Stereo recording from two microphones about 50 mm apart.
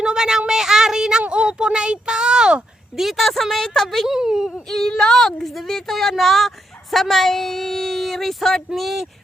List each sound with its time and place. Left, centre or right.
0.0 s child singing: centre
1.2 s a sound: centre
2.9 s speech: centre
4.5 s speech: centre